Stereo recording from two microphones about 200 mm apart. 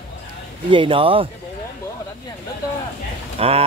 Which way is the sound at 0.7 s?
25° right (ahead or behind).